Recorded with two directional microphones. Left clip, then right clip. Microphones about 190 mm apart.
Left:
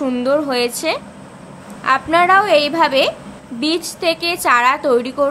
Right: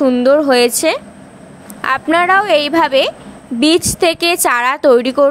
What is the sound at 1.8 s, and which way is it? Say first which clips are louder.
A woman's voice: right 1 dB; 45° right (ahead or behind).